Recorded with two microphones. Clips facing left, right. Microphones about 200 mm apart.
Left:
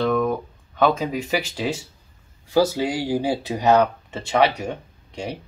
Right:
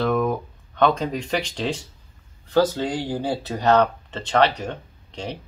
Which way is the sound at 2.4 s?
10° left (ahead or behind).